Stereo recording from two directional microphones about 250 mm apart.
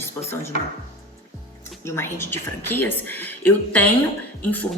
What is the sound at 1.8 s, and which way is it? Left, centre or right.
A woman's voice, centre.